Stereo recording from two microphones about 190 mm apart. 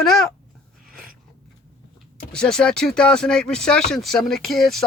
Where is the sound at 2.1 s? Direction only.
5° left (ahead or behind).